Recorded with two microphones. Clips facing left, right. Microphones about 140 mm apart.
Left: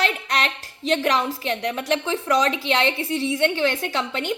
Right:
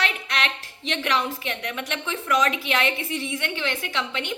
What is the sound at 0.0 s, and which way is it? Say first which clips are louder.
A woman's voice: left 4 dB; 40° left (ahead or behind).